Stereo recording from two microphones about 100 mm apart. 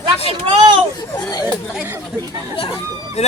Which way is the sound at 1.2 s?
40° left (ahead or behind).